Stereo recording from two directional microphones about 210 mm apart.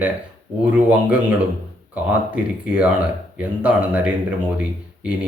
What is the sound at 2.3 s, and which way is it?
Speech, 5° right (ahead or behind).